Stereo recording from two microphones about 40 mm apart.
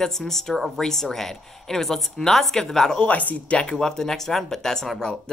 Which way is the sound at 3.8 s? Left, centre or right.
Centre.